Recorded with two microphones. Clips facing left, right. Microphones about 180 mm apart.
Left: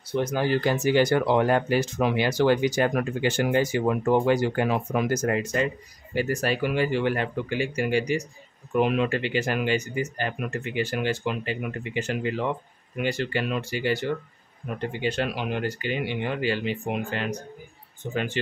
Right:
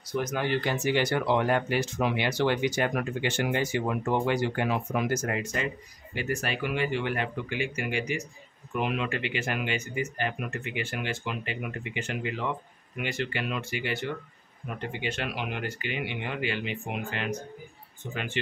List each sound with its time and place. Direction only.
0.1 s speech: 30° left (ahead or behind)